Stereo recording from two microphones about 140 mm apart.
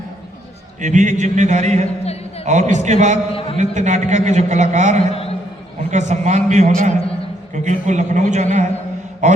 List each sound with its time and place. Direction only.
0.8 s a man's voice: 60° right (ahead or behind)
3.3 s a man's voice: 40° left (ahead or behind)
3.6 s a man's voice: 60° right (ahead or behind)